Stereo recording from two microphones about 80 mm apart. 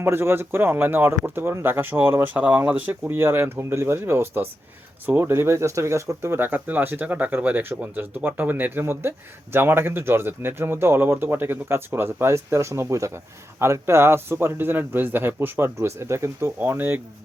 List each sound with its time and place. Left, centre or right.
0.0 s speech: right